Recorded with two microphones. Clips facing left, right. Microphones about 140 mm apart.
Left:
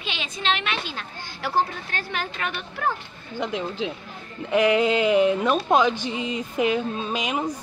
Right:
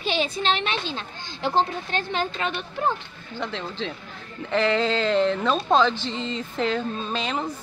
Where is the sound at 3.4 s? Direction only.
10° left (ahead or behind).